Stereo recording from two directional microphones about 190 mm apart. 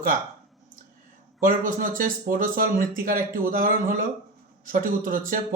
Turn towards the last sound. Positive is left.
turn(degrees=-45)  # may be behind; listen again after turning